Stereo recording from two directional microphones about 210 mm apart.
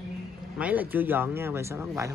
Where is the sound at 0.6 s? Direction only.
5° right (ahead or behind).